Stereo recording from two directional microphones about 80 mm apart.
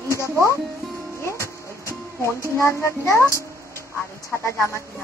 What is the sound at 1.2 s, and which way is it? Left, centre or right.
Music, left.